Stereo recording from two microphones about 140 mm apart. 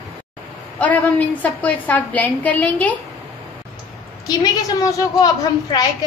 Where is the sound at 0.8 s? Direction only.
10° left (ahead or behind).